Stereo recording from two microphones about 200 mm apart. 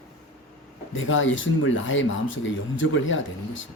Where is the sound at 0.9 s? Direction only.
75° left (ahead or behind).